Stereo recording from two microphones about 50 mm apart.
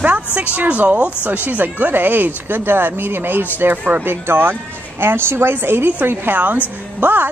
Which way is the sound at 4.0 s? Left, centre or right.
Right.